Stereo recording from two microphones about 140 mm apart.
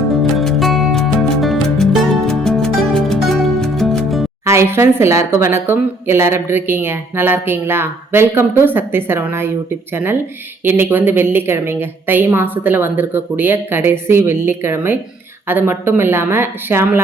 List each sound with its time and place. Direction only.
0.2 s music: centre (ahead or behind)
4.4 s speech: 20° right (ahead or behind)